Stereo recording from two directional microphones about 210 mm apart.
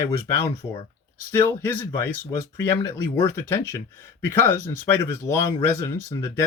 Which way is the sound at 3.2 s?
10° left (ahead or behind).